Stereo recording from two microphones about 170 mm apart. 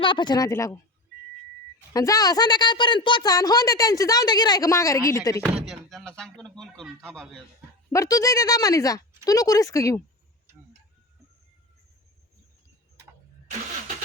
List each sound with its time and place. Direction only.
0.0 s a woman's voice: 30° left (ahead or behind)
1.9 s a woman's voice: 20° left (ahead or behind)
5.5 s speech: centre (ahead or behind)
7.9 s a woman's voice: 20° left (ahead or behind)